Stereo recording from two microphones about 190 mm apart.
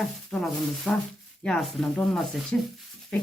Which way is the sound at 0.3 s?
Centre (ahead or behind).